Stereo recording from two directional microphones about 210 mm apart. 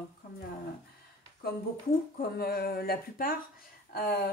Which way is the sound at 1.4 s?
45° left (ahead or behind).